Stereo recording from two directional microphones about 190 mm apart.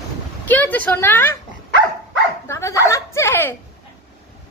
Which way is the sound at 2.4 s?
15° left (ahead or behind).